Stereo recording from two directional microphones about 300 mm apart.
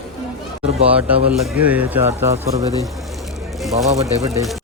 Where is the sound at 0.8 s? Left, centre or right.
Centre.